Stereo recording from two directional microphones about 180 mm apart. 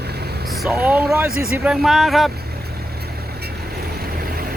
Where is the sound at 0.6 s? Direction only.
5° right (ahead or behind).